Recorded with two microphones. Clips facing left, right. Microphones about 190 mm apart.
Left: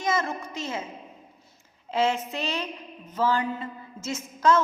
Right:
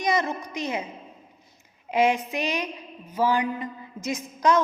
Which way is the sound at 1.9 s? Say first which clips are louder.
Right 3 dB; 15° right (ahead or behind).